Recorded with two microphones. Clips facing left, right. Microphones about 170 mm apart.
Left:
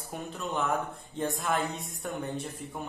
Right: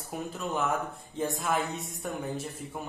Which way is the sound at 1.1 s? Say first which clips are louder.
Even; centre (ahead or behind).